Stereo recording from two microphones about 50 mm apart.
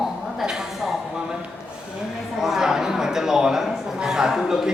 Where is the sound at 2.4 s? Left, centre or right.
Centre.